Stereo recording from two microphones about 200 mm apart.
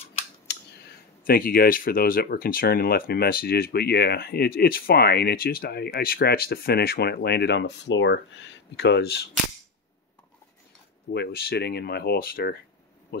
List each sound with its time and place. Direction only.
0.5 s speech: 55° left (ahead or behind)
11.1 s speech: 55° left (ahead or behind)